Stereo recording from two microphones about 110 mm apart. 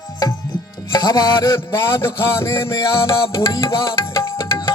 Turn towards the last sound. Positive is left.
turn(degrees=25)  # may be behind; listen again after turning